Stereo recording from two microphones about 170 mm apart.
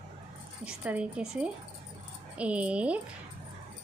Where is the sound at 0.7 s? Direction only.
5° right (ahead or behind).